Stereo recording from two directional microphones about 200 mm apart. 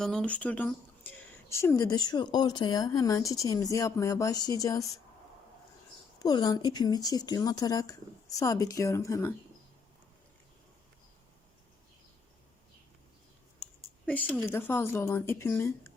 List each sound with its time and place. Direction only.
0.0 s speech: 5° left (ahead or behind)
6.1 s speech: 20° left (ahead or behind)
14.0 s speech: 10° left (ahead or behind)